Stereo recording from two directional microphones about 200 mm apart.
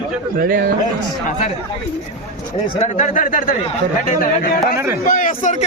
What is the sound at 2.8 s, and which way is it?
A man's voice, 35° left (ahead or behind).